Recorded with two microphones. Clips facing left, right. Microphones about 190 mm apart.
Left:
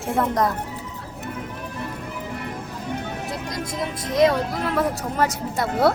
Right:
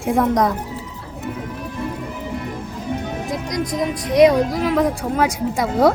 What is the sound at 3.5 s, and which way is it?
Speech, 15° right (ahead or behind).